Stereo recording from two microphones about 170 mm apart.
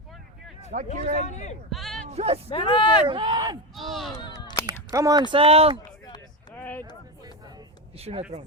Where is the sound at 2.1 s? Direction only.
40° right (ahead or behind).